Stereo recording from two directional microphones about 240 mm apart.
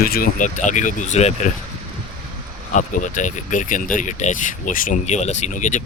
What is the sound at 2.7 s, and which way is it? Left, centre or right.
Speech, left.